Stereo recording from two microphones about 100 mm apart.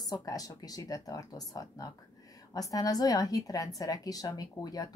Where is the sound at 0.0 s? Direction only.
40° left (ahead or behind).